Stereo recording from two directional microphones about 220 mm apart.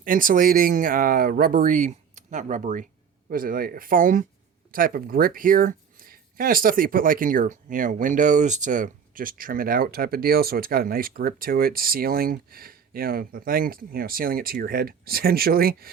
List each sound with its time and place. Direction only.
0.0 s speech: 40° right (ahead or behind)